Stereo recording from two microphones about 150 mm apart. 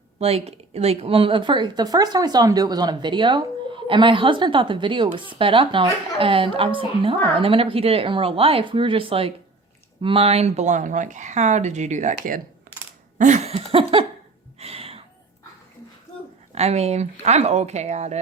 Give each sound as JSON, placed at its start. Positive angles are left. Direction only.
{"t": 0.2, "sound": "a woman's voice", "side_deg": -45}
{"t": 13.1, "sound": "a sound", "side_deg": -55}
{"t": 16.6, "sound": "speech", "side_deg": -45}